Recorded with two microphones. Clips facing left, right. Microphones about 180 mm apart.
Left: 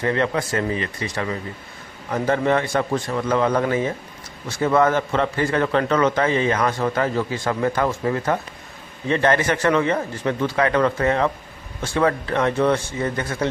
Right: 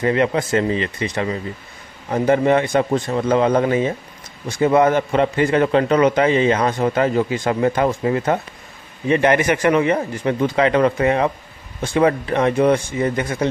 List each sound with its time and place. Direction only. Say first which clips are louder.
0.0 s a man's voice: right 4 dB; 15° right (ahead or behind)